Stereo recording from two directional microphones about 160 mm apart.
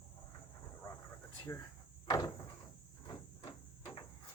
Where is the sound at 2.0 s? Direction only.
20° left (ahead or behind).